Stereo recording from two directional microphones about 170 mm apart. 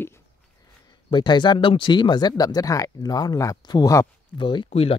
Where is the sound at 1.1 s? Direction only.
25° left (ahead or behind).